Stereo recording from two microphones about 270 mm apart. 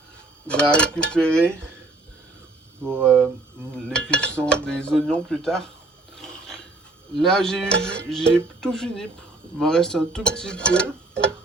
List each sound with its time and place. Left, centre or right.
0.4 s cutlery: centre
3.0 s cutlery: centre
7.2 s cutlery: centre